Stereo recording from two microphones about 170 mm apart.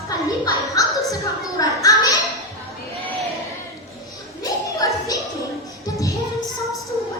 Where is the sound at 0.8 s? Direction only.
20° left (ahead or behind).